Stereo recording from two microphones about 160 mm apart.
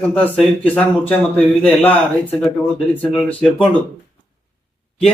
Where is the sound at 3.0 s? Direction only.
Centre (ahead or behind).